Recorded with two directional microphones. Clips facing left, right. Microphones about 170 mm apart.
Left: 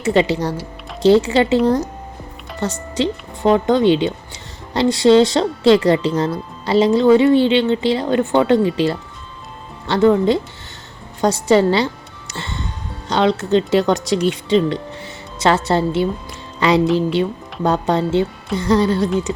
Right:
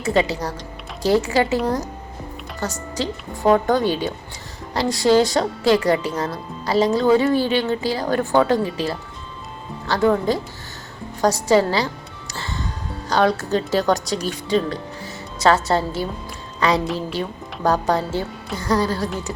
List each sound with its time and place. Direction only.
0.0 s speech: 25° left (ahead or behind)
12.3 s music: 25° left (ahead or behind)
13.1 s a woman's voice: 25° left (ahead or behind)
16.8 s a woman's voice: centre (ahead or behind)
17.2 s speech: 25° left (ahead or behind)